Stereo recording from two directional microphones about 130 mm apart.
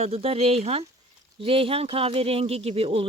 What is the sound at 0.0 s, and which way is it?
Speech, 50° right (ahead or behind).